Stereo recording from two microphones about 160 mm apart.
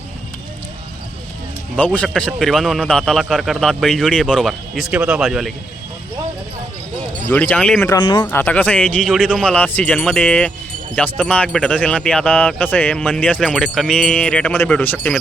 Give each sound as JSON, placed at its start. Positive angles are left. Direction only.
{"t": 1.7, "sound": "a man's voice", "side_deg": 10}
{"t": 7.3, "sound": "speech", "side_deg": 10}
{"t": 7.9, "sound": "speech", "side_deg": 30}
{"t": 8.3, "sound": "speech", "side_deg": 10}